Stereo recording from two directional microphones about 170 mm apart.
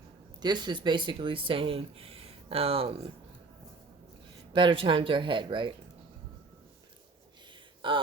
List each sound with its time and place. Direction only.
0.4 s speech: 25° right (ahead or behind)
4.5 s speech: 30° right (ahead or behind)
7.8 s speech: 30° right (ahead or behind)